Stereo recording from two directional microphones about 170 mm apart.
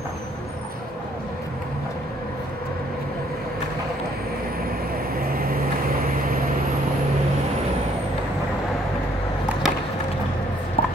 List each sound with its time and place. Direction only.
5.3 s vehicle: 60° right (ahead or behind)
10.8 s chopping: 35° left (ahead or behind)